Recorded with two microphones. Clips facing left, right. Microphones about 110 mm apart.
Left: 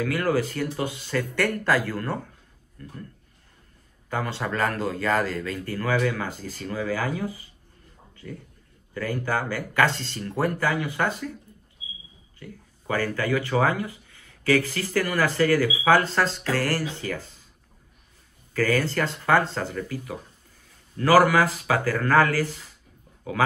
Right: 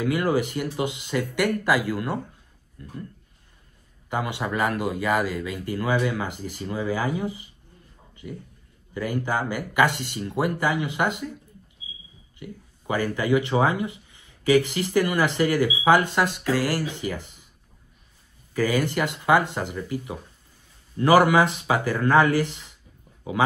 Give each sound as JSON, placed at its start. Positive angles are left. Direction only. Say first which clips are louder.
{"t": 0.0, "sound": "speech", "louder": "right 1 dB", "side_deg": -15}
{"t": 4.1, "sound": "speech", "louder": "right 1 dB", "side_deg": -15}
{"t": 12.4, "sound": "speech", "louder": "right 3 dB", "side_deg": -15}
{"t": 18.5, "sound": "speech", "louder": "even", "side_deg": -15}